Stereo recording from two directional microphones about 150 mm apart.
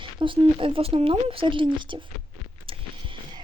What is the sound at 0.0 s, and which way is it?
Speech, 35° right (ahead or behind).